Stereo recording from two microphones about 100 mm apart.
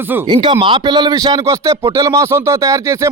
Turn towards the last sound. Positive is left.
turn(degrees=-30)  # may be behind; listen again after turning